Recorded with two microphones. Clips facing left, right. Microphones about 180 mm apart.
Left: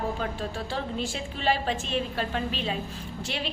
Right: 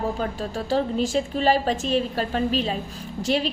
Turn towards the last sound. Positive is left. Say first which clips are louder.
# right 9 dB
turn(degrees=-40)  # may be behind; listen again after turning